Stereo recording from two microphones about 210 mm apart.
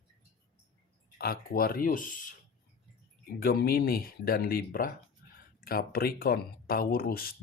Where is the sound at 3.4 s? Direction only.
45° left (ahead or behind).